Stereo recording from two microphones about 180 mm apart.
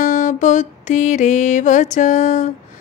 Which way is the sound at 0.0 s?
45° left (ahead or behind).